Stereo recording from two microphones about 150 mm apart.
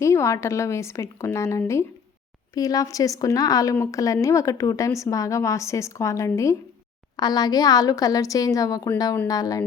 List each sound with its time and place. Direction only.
0.0 s speech: 20° left (ahead or behind)